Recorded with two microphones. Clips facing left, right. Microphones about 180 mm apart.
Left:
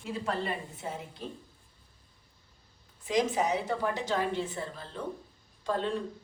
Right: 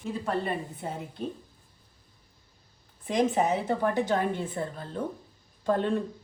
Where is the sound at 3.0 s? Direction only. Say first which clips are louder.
Right 3 dB; 55° right (ahead or behind).